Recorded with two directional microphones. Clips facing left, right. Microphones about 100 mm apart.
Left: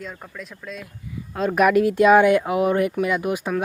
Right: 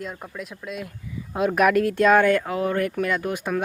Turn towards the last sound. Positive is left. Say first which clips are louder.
# left 2 dB
turn(degrees=5)  # may be behind; listen again after turning